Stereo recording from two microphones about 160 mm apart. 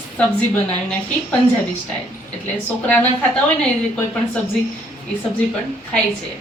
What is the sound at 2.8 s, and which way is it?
Speech, 10° left (ahead or behind).